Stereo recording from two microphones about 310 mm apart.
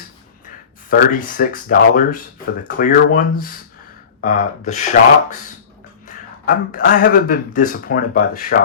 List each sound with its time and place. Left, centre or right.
0.9 s speech: left